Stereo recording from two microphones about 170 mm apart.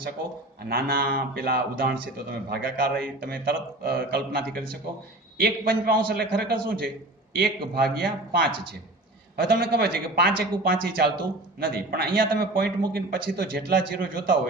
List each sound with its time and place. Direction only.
0.7 s a man's voice: 60° right (ahead or behind)
9.4 s a man's voice: 65° right (ahead or behind)